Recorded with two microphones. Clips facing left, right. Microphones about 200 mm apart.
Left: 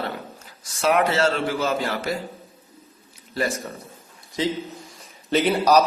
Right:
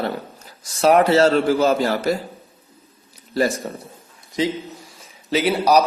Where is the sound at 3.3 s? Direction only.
35° right (ahead or behind).